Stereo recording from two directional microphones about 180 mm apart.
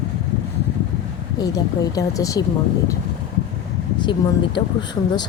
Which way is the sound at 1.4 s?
20° left (ahead or behind).